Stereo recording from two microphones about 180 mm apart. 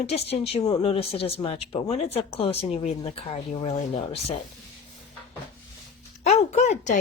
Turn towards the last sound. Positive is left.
turn(degrees=40)  # may be behind; listen again after turning